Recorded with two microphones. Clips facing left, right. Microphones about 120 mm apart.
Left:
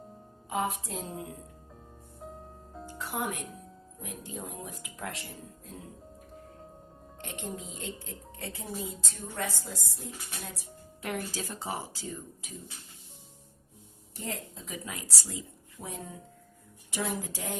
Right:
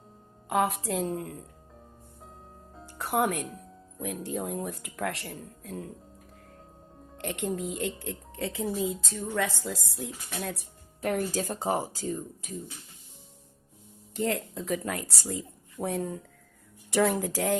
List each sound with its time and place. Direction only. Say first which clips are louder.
0.4 s a woman's voice: right 5 dB; 70° right (ahead or behind)
3.0 s speech: right 8 dB; 60° right (ahead or behind)
7.2 s speech: right 8 dB; 70° right (ahead or behind)
11.0 s speech: right 7 dB; 45° right (ahead or behind)
14.1 s a woman's voice: right 10 dB; 80° right